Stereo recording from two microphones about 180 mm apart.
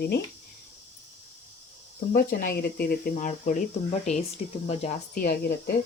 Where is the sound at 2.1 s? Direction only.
55° left (ahead or behind).